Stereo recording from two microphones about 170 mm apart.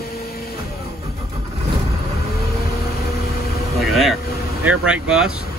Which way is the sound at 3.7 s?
Centre (ahead or behind).